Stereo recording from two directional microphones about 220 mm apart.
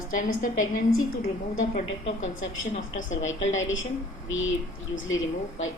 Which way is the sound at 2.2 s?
65° left (ahead or behind).